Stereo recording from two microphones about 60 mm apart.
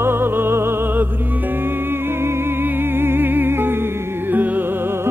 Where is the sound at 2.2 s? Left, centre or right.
Right.